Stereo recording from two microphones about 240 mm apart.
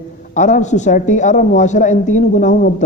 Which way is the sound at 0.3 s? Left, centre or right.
Left.